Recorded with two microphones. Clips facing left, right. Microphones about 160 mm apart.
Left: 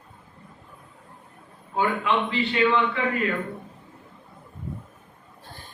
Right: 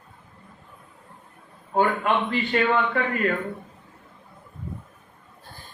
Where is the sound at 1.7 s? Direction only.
50° right (ahead or behind).